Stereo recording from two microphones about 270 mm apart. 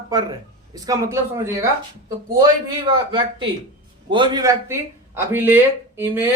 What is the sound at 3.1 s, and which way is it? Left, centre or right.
Speech, centre.